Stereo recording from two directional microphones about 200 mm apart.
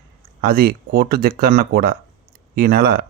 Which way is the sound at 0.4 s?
50° right (ahead or behind).